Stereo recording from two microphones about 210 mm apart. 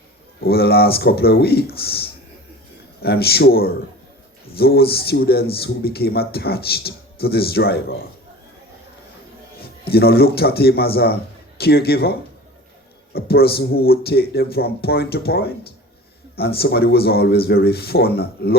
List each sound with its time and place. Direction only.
0.4 s speech: 50° left (ahead or behind)
9.9 s speech: 50° left (ahead or behind)
13.1 s speech: 50° left (ahead or behind)